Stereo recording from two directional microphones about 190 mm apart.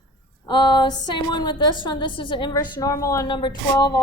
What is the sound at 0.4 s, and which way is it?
A woman's voice, 25° left (ahead or behind).